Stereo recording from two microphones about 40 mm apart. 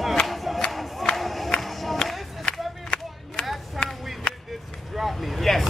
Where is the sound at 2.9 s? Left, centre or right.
Left.